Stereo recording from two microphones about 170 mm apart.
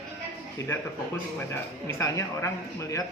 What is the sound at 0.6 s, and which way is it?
Speech, 20° left (ahead or behind).